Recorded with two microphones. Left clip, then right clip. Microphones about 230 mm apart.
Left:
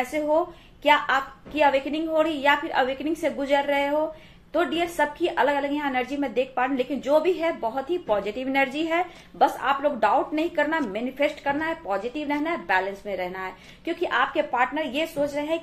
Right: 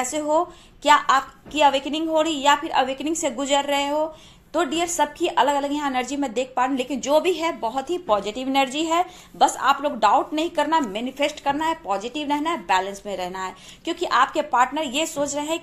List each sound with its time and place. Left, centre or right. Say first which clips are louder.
0.1 s a woman's voice: right 1 dB; right